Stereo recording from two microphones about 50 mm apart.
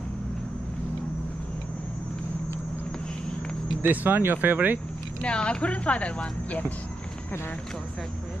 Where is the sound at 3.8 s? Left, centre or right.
Right.